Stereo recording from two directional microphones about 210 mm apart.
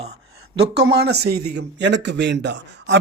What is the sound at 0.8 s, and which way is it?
A man's voice, 50° right (ahead or behind).